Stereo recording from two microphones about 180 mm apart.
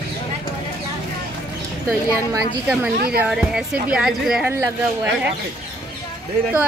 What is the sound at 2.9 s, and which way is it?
Speech, 55° right (ahead or behind).